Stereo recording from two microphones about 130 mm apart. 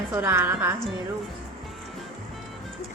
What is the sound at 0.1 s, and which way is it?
Speech, 15° right (ahead or behind).